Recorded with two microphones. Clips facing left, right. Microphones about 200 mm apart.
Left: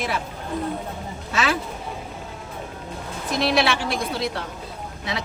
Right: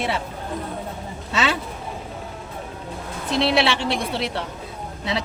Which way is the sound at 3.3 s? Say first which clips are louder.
Right 1 dB; 25° right (ahead or behind).